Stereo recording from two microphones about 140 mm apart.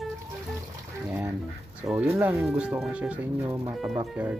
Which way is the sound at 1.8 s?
10° right (ahead or behind).